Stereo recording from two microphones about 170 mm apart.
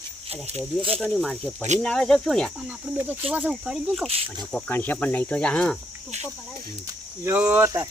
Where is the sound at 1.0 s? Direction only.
5° left (ahead or behind).